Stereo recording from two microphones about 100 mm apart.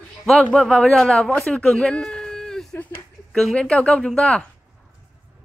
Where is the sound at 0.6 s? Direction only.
5° left (ahead or behind).